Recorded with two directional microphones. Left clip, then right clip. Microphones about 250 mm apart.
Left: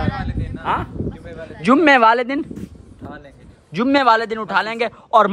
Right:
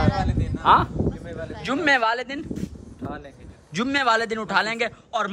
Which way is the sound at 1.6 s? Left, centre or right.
Left.